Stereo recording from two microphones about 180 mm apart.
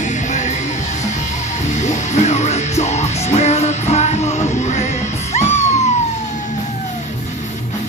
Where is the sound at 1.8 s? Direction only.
40° left (ahead or behind).